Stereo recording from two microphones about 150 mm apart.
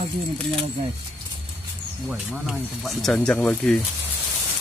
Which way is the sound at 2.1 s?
Centre (ahead or behind).